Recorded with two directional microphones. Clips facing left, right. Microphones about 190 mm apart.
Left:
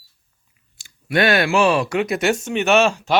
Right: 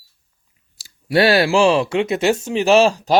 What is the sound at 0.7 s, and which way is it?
Speech, 35° right (ahead or behind).